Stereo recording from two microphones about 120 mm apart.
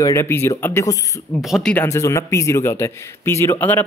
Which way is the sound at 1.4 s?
Centre (ahead or behind).